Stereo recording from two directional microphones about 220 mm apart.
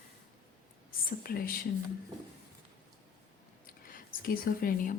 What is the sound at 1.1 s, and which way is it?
Speech, 40° left (ahead or behind).